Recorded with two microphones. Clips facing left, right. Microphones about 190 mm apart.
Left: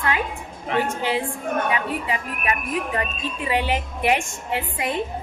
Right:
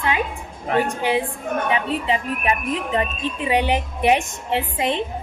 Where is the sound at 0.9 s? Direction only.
15° right (ahead or behind).